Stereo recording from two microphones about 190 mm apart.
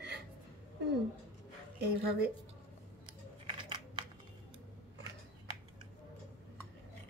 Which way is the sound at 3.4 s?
25° right (ahead or behind).